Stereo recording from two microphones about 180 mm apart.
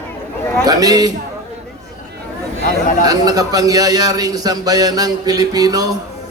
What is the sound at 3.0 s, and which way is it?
A man's voice, 20° right (ahead or behind).